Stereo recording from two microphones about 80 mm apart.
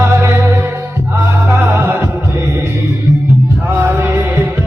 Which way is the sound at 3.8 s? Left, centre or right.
Right.